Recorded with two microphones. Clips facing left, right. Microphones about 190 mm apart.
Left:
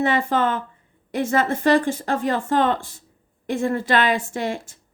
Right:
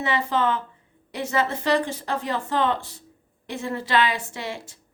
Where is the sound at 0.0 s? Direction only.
50° left (ahead or behind).